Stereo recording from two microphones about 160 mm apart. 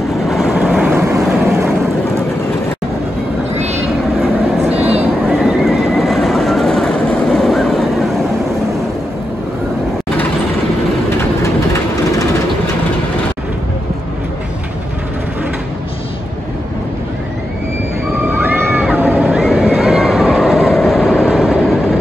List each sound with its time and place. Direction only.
0.3 s vehicle: 5° right (ahead or behind)
0.9 s vehicle: 15° right (ahead or behind)
4.2 s vehicle: 10° right (ahead or behind)
18.3 s a sound: 10° right (ahead or behind)